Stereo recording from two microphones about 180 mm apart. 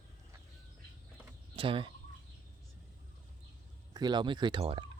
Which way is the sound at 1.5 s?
30° right (ahead or behind).